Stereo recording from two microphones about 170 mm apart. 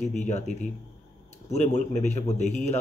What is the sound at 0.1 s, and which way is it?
A man's voice, 45° left (ahead or behind).